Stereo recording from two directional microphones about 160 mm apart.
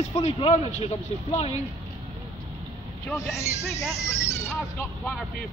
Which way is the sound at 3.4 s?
20° left (ahead or behind).